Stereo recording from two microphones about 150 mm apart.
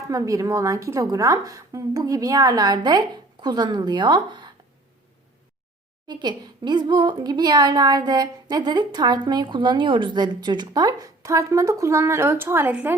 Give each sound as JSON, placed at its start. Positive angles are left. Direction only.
{"t": 0.1, "sound": "speech", "side_deg": -20}
{"t": 6.1, "sound": "speech", "side_deg": -30}